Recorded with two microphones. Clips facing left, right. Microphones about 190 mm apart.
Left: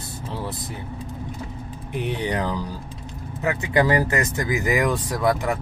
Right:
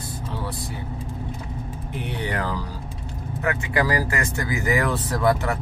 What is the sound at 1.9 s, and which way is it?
Speech, 15° left (ahead or behind).